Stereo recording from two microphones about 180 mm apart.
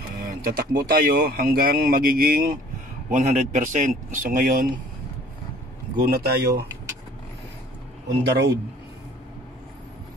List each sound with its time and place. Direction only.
0.2 s speech: 55° right (ahead or behind)
3.1 s a man's voice: 40° right (ahead or behind)
6.0 s speech: 60° right (ahead or behind)
8.3 s a man's voice: 70° right (ahead or behind)